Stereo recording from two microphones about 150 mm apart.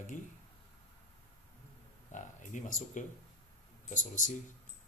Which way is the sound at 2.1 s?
55° left (ahead or behind).